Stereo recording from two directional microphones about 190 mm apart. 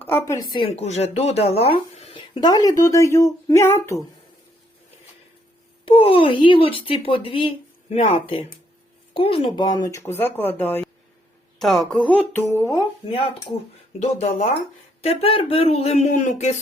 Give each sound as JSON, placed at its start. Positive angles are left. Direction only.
{"t": 0.0, "sound": "speech", "side_deg": 15}
{"t": 5.8, "sound": "speech", "side_deg": 30}
{"t": 14.0, "sound": "speech", "side_deg": 35}